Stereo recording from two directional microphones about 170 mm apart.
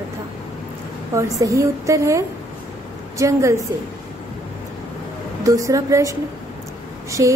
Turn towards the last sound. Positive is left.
turn(degrees=-20)  # may be behind; listen again after turning